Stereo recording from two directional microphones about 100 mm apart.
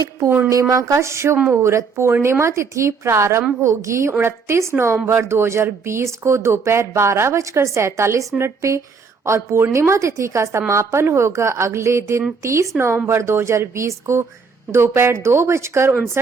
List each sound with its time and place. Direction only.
0.7 s speech: 35° right (ahead or behind)